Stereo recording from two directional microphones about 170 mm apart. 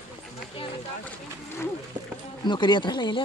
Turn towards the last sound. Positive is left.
turn(degrees=25)  # may be behind; listen again after turning